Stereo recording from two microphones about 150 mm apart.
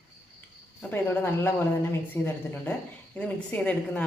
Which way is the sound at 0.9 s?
15° left (ahead or behind).